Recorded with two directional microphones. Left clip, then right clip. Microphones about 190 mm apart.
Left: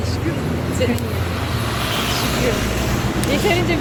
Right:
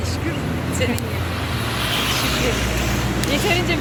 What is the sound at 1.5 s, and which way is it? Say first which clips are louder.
Vehicle: right 1 dB; 65° left (ahead or behind).